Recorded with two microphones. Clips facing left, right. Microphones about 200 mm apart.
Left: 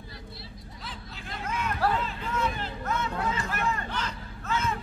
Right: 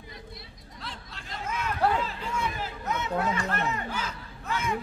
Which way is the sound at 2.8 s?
20° right (ahead or behind).